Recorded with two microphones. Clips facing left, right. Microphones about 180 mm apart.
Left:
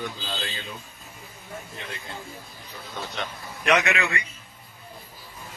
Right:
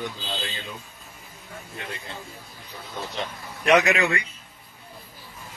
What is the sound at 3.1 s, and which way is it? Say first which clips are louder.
Speech: right 1 dB; 35° right (ahead or behind).